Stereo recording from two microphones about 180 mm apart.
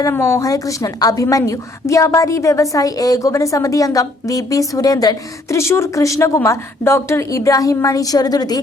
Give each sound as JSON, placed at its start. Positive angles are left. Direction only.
{"t": 0.0, "sound": "a woman's voice", "side_deg": 15}